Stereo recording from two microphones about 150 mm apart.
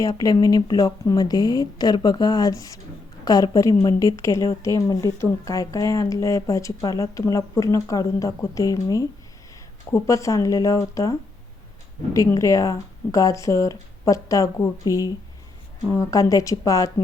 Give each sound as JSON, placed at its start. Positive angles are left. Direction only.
{"t": 0.2, "sound": "speech", "side_deg": 25}